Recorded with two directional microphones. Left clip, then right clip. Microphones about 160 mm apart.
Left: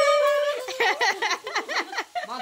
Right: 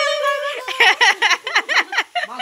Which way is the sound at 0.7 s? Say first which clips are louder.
Right 9 dB; 10° left (ahead or behind).